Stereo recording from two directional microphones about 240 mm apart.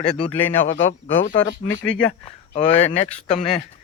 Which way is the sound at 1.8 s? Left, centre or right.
Left.